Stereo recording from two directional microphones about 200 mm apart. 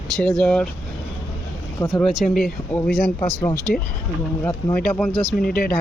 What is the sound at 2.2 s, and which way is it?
Speech, centre (ahead or behind).